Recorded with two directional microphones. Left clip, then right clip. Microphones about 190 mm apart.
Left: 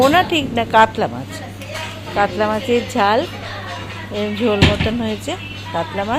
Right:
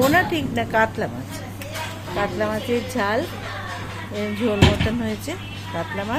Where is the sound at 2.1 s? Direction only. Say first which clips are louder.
Left 7 dB; 10° left (ahead or behind).